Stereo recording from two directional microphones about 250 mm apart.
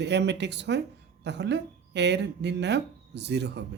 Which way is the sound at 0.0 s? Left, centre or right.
Right.